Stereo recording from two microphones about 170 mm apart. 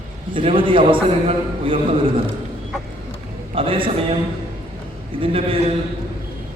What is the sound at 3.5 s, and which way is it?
Speech, 30° right (ahead or behind).